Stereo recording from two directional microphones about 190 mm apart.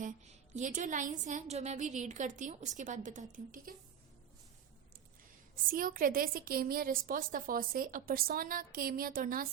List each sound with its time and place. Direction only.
0.0 s a woman's voice: 40° right (ahead or behind)
5.7 s a woman's voice: 50° right (ahead or behind)